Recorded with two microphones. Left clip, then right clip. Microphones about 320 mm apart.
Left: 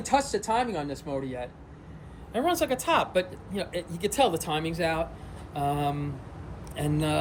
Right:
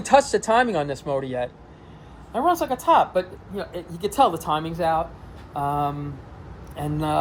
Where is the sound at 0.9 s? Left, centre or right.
Right.